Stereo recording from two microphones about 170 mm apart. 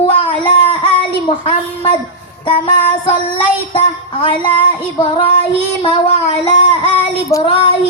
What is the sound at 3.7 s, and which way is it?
Child singing, 30° left (ahead or behind).